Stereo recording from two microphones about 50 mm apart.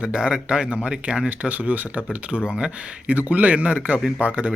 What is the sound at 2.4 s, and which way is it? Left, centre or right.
Speech, centre.